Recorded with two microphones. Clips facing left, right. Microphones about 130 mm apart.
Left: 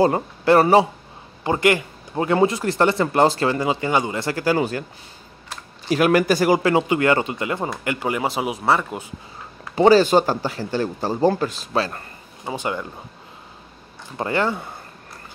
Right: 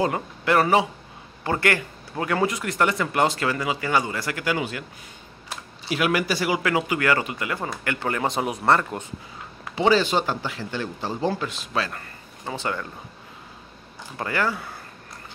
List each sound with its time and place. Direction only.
0.0 s speech: 30° left (ahead or behind)
1.4 s a man's voice: 20° left (ahead or behind); by 4.8 s 40° left (ahead or behind)
5.9 s speech: 45° left (ahead or behind)
6.6 s a man's voice: 30° left (ahead or behind); by 9.0 s 5° left (ahead or behind)
9.8 s speech: 40° left (ahead or behind)
12.4 s speech: 15° left (ahead or behind)
14.1 s a man's voice: 25° left (ahead or behind)